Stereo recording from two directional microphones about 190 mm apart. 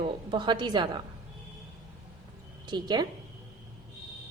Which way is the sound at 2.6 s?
25° right (ahead or behind).